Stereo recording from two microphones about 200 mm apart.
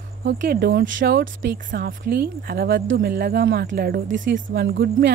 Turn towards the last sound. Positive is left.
turn(degrees=-60)  # may be behind; listen again after turning